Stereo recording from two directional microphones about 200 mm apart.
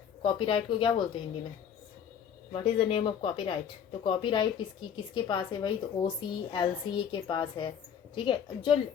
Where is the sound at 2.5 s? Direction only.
25° left (ahead or behind).